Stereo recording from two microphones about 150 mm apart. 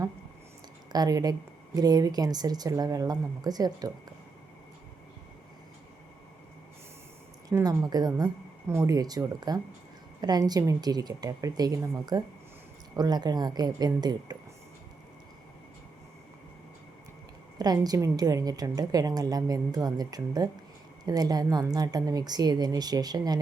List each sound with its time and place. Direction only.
0.9 s speech: 25° right (ahead or behind)
7.5 s speech: 20° right (ahead or behind)
17.6 s speech: 25° right (ahead or behind)